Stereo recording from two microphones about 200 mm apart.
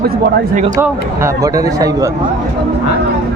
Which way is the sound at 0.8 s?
15° right (ahead or behind).